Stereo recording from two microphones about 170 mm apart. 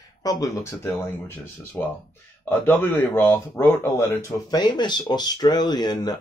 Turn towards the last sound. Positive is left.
turn(degrees=25)  # may be behind; listen again after turning